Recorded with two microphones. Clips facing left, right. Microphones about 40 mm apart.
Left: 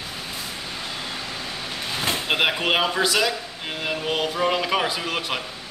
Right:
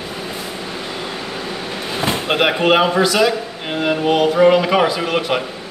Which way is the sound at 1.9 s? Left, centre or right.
Centre.